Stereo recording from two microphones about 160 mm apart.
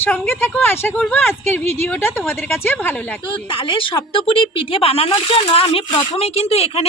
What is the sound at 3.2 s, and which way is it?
Speech, 30° left (ahead or behind).